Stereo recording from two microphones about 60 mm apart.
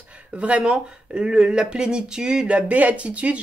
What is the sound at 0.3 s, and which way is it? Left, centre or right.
Speech, right.